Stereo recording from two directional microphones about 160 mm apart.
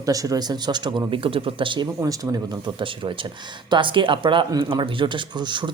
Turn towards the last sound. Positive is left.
turn(degrees=-30)  # may be behind; listen again after turning